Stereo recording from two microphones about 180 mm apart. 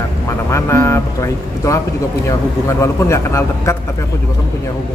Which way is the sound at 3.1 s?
15° left (ahead or behind).